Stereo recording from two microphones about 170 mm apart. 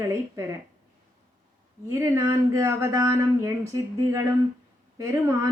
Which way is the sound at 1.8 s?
20° right (ahead or behind).